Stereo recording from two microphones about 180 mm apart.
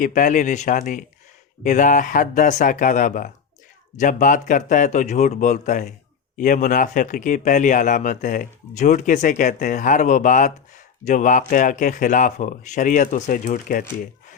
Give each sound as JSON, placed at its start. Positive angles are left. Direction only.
{"t": 0.0, "sound": "speech", "side_deg": 45}